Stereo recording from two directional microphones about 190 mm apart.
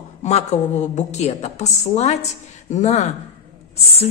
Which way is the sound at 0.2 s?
35° left (ahead or behind).